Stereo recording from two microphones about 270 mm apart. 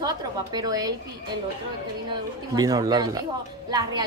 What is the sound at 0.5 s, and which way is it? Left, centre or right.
Speech, centre.